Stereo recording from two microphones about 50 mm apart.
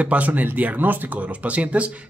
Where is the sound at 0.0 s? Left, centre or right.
Right.